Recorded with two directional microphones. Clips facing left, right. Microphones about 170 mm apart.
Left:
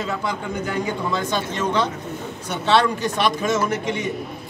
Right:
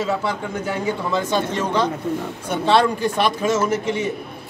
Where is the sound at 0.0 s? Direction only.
5° right (ahead or behind).